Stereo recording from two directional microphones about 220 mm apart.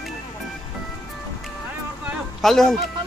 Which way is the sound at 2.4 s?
Centre (ahead or behind).